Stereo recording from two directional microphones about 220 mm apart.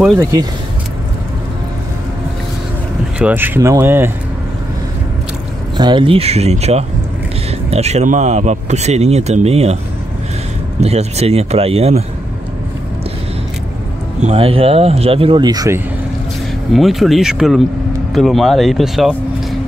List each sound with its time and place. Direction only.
0.2 s speech: 15° right (ahead or behind)
3.2 s speech: 10° right (ahead or behind)
5.8 s speech: 20° right (ahead or behind)
10.8 s speech: 30° right (ahead or behind)
14.2 s speech: 25° right (ahead or behind)
16.7 s speech: centre (ahead or behind)